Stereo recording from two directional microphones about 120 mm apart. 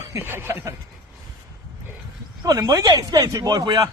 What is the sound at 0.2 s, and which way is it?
Speech, 20° right (ahead or behind).